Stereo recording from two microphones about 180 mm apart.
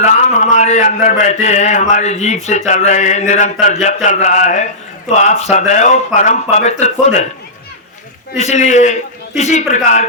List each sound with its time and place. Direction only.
0.0 s a man's voice: 40° left (ahead or behind)
8.4 s a man's voice: 40° left (ahead or behind)